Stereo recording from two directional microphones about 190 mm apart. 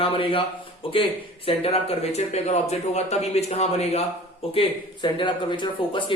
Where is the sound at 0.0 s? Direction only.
30° left (ahead or behind).